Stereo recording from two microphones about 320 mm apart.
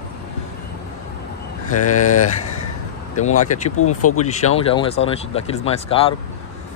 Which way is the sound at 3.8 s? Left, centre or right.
Left.